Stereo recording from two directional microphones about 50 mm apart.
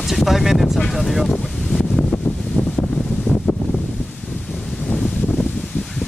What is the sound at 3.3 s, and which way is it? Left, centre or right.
Wind noise, left.